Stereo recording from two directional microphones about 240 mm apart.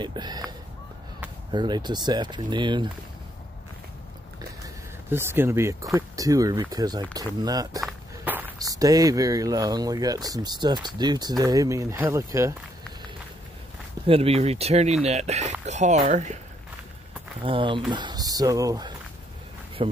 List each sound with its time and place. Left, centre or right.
0.0 s speech: centre
5.1 s speech: centre
7.8 s walk: centre
8.5 s speech: centre
14.0 s speech: right
17.4 s speech: right